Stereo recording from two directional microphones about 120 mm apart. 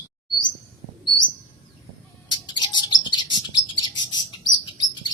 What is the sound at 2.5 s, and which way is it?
Bird, 40° left (ahead or behind).